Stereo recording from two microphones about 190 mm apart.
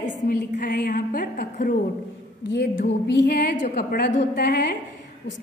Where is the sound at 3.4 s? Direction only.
45° left (ahead or behind).